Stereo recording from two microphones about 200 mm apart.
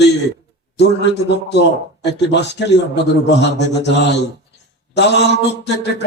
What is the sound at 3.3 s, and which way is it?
Mantra, 60° left (ahead or behind).